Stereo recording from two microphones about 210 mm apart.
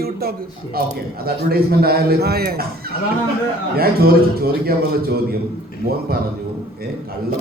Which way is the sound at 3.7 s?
45° right (ahead or behind).